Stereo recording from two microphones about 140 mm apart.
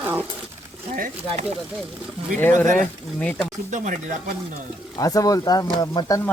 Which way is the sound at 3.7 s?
65° right (ahead or behind).